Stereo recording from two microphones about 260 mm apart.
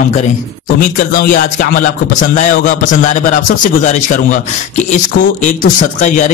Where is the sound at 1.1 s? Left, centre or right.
Left.